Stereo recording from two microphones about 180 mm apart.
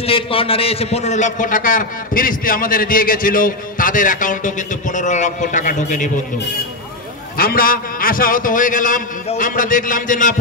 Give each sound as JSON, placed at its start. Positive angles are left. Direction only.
{"t": 0.0, "sound": "a man's voice", "side_deg": 30}
{"t": 7.3, "sound": "a man's voice", "side_deg": 55}